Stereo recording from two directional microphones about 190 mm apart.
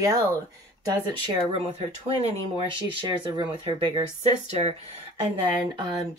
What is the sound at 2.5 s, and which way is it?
Speech, 25° right (ahead or behind).